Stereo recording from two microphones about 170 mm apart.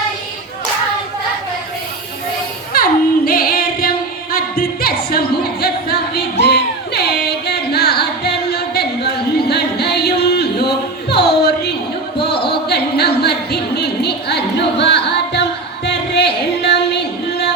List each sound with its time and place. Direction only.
2.7 s singing: 60° left (ahead or behind)
6.4 s music: 70° left (ahead or behind)
12.2 s a sound: 70° left (ahead or behind)